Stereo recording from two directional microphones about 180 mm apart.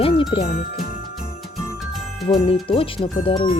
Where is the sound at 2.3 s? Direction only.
30° left (ahead or behind).